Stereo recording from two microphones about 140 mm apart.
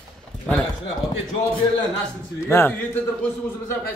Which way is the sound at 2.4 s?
15° left (ahead or behind).